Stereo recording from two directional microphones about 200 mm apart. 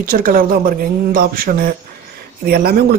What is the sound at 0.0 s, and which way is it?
Speech, 45° right (ahead or behind).